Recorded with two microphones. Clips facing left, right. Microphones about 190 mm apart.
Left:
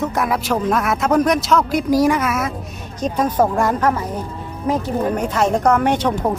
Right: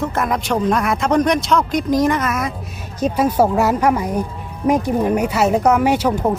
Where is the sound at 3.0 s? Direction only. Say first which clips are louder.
Right 2 dB; 10° right (ahead or behind).